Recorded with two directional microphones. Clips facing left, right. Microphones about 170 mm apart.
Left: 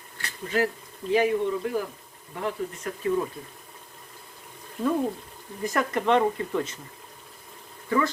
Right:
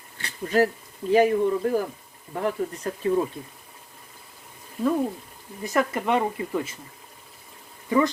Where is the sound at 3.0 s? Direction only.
30° right (ahead or behind).